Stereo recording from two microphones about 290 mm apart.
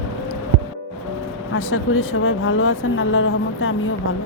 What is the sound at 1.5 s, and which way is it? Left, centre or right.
Speech, left.